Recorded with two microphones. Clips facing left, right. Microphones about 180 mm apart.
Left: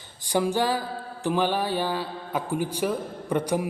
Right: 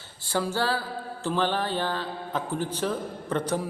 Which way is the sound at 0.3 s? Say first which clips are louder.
Left 3 dB; 15° left (ahead or behind).